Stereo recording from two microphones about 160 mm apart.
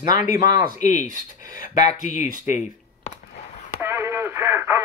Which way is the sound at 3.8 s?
15° right (ahead or behind).